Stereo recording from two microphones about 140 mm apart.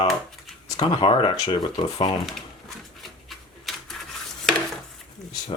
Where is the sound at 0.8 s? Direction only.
40° left (ahead or behind).